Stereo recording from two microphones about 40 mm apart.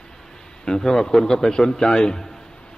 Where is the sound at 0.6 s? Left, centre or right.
Centre.